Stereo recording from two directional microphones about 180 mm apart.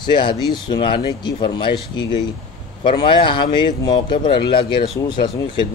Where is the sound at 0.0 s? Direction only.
25° left (ahead or behind).